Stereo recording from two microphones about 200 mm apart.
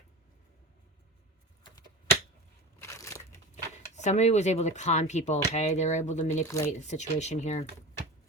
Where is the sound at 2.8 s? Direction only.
15° left (ahead or behind).